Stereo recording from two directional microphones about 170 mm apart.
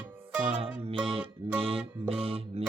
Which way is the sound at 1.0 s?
30° right (ahead or behind).